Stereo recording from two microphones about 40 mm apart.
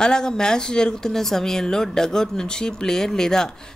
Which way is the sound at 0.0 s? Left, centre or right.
Centre.